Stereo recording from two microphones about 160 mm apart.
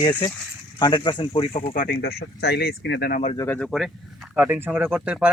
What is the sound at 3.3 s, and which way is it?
Speech, 15° left (ahead or behind).